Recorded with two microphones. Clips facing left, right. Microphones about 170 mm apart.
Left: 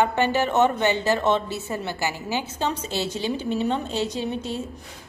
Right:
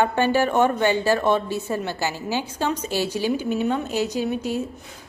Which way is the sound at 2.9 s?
10° right (ahead or behind).